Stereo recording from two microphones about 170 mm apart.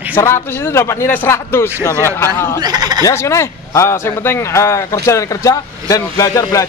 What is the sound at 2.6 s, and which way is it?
Speech, 25° right (ahead or behind).